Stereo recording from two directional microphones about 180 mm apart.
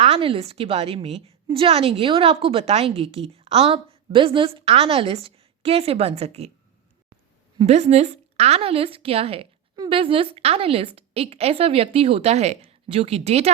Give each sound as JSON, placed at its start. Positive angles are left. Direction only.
{"t": 0.0, "sound": "a woman's voice", "side_deg": -35}
{"t": 7.7, "sound": "a woman's voice", "side_deg": -40}